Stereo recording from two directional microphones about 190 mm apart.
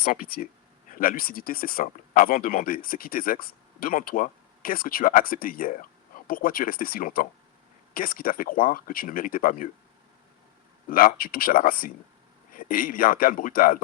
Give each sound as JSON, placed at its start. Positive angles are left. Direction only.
{"t": 0.0, "sound": "speech", "side_deg": 50}
{"t": 10.8, "sound": "speech", "side_deg": 45}